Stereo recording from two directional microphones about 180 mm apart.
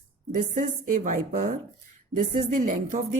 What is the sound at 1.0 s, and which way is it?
Speech, 45° right (ahead or behind).